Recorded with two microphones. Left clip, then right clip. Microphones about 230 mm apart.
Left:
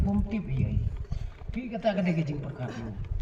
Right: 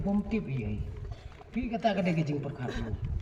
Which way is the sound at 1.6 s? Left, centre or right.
Right.